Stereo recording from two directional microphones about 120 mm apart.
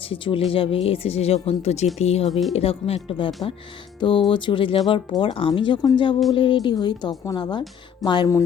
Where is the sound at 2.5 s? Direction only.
55° left (ahead or behind).